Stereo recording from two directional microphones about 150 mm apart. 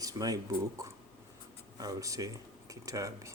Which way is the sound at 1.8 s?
20° right (ahead or behind).